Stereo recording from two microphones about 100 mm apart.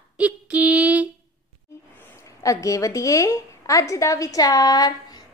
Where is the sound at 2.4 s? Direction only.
35° left (ahead or behind).